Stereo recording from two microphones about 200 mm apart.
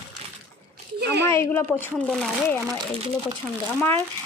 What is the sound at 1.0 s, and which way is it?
Speech, 55° right (ahead or behind).